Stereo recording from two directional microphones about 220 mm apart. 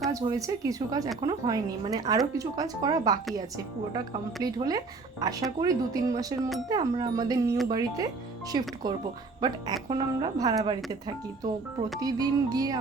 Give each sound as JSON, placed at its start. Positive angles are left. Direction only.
{"t": 0.1, "sound": "a woman's voice", "side_deg": -15}
{"t": 4.5, "sound": "a woman's voice", "side_deg": -15}
{"t": 11.9, "sound": "a woman's voice", "side_deg": -15}